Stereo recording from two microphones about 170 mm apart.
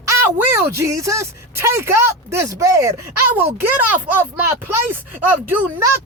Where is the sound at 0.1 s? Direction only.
15° right (ahead or behind).